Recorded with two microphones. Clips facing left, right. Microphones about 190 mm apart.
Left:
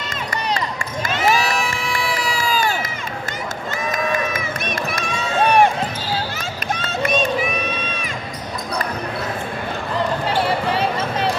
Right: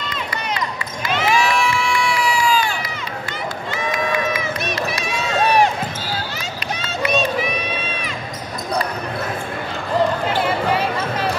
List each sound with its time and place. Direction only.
1.0 s crowd: 45° left (ahead or behind)
3.9 s run: 45° left (ahead or behind)
6.8 s run: 50° left (ahead or behind)